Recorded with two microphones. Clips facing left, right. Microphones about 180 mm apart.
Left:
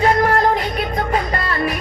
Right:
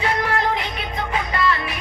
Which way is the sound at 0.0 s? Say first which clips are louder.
Left 7 dB; 45° left (ahead or behind).